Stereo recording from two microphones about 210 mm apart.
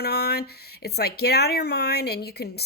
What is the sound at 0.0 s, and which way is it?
Speech, 50° left (ahead or behind).